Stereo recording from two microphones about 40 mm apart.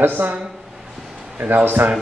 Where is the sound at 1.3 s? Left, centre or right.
Right.